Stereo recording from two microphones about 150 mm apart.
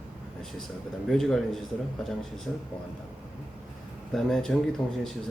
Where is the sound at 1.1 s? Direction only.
Centre (ahead or behind).